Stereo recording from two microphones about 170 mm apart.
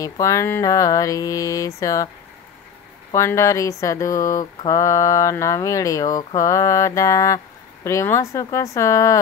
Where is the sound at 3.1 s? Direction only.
15° left (ahead or behind).